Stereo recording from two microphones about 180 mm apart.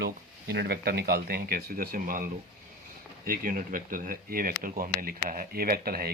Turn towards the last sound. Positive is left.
turn(degrees=-55)  # may be behind; listen again after turning